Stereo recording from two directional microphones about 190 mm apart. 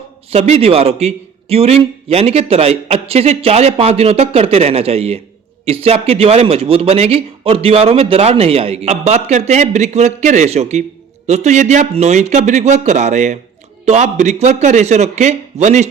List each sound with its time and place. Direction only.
0.3 s a man's voice: 35° right (ahead or behind)